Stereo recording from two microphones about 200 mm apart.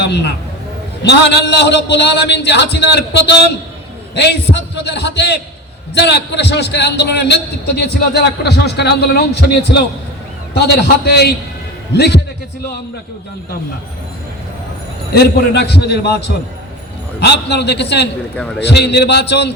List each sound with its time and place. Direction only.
0.0 s a man's voice: 55° left (ahead or behind)
10.8 s a man's voice: 55° left (ahead or behind)
15.1 s a man's voice: 55° left (ahead or behind)